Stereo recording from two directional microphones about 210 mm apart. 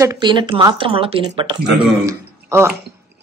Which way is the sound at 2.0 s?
15° right (ahead or behind).